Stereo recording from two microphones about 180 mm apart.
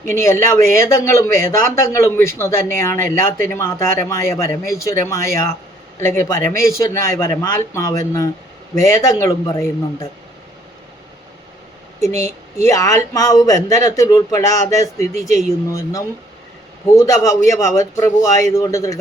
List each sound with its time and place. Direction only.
0.0 s speech: 15° left (ahead or behind)
12.6 s speech: 15° left (ahead or behind)